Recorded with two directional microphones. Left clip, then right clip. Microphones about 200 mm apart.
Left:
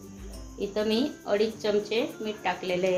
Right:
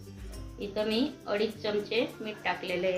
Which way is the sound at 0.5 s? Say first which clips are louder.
Left 3 dB; 50° left (ahead or behind).